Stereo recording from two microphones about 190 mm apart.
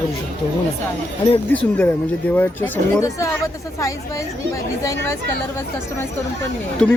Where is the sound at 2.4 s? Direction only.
10° left (ahead or behind).